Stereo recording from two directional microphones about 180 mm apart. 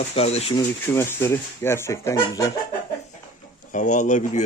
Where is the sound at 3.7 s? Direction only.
45° left (ahead or behind).